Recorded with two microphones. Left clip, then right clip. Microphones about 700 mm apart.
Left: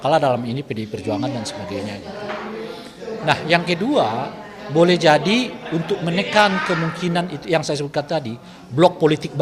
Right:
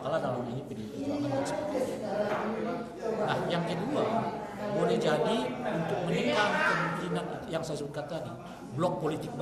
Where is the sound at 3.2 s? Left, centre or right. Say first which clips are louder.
Left 15 dB; left.